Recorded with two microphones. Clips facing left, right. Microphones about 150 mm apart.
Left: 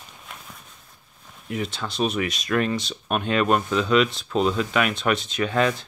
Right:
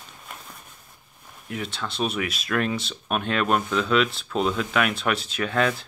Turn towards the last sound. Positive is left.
turn(degrees=0)  # may be behind; listen again after turning